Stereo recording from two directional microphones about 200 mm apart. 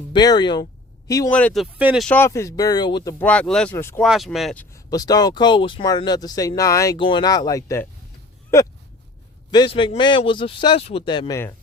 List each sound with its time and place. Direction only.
0.1 s speech: 20° left (ahead or behind)
1.3 s speech: 5° left (ahead or behind)
2.0 s speech: 10° left (ahead or behind)
4.0 s speech: centre (ahead or behind)
4.7 s speech: 20° left (ahead or behind)